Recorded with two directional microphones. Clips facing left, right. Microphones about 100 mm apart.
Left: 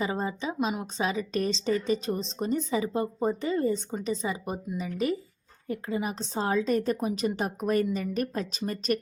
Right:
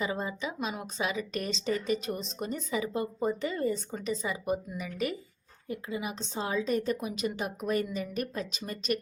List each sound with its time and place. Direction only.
0.0 s a woman's voice: 35° left (ahead or behind)
0.7 s a woman's voice: 25° left (ahead or behind)
1.0 s a woman's voice: 35° left (ahead or behind)
5.6 s a woman's voice: 45° left (ahead or behind)